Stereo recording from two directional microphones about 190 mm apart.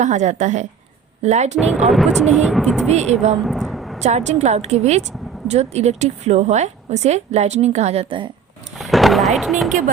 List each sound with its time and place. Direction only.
0.0 s a woman's voice: 40° right (ahead or behind)
1.5 s speech: centre (ahead or behind)
2.9 s a woman's voice: 35° right (ahead or behind)
3.3 s a sound: centre (ahead or behind)
4.0 s a woman's voice: 35° right (ahead or behind)
8.8 s fireworks: centre (ahead or behind)